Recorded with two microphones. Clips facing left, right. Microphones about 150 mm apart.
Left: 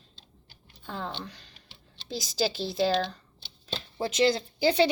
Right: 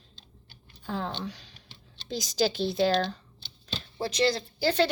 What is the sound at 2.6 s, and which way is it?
Speech, centre (ahead or behind).